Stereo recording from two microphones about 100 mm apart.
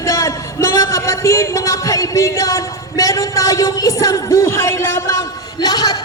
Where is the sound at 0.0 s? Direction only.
30° left (ahead or behind).